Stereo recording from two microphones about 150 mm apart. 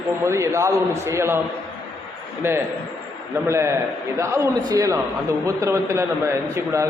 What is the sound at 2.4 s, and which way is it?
A man's voice, 15° right (ahead or behind).